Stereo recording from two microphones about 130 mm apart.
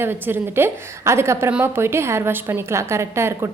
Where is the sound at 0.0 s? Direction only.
15° right (ahead or behind).